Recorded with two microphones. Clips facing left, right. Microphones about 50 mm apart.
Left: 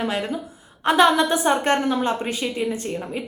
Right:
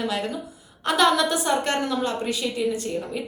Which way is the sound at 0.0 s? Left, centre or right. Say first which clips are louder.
Left 2 dB; left.